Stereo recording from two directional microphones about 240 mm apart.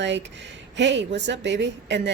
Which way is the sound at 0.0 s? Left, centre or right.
Right.